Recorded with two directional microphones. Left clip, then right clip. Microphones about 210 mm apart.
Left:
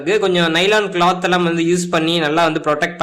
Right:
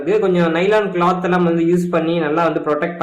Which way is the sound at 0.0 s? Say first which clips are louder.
Even; 35° left (ahead or behind).